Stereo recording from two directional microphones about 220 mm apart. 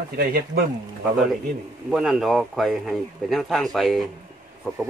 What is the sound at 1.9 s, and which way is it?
Speech, centre (ahead or behind).